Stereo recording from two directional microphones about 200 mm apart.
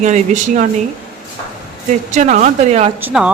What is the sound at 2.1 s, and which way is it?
Speech, 35° right (ahead or behind).